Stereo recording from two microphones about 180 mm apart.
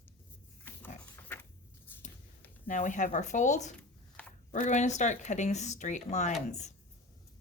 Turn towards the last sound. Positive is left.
turn(degrees=40)  # may be behind; listen again after turning